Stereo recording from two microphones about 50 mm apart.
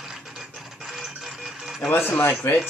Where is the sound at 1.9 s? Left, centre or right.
Left.